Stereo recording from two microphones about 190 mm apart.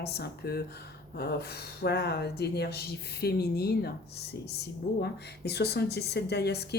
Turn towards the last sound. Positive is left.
turn(degrees=60)  # may be behind; listen again after turning